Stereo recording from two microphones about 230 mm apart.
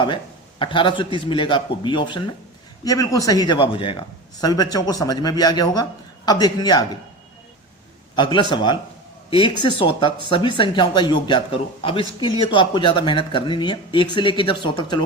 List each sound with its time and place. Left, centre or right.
0.6 s a man's voice: left
8.1 s a man's voice: centre